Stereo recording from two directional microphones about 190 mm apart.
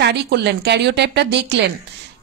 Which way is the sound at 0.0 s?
60° right (ahead or behind).